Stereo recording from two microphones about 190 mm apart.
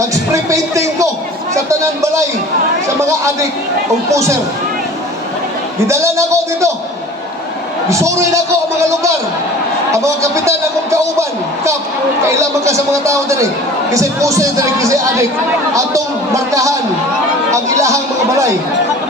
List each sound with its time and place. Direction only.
0.0 s music: 15° right (ahead or behind)
1.8 s a man's voice: 15° right (ahead or behind)
4.1 s a man's voice: 15° right (ahead or behind)
5.9 s a man's voice: 15° right (ahead or behind)
7.9 s a man's voice: 15° right (ahead or behind)
9.9 s a man's voice: 15° right (ahead or behind)
12.2 s a man's voice: 15° right (ahead or behind)